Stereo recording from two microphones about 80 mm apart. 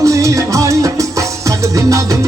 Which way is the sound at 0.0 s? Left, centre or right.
Right.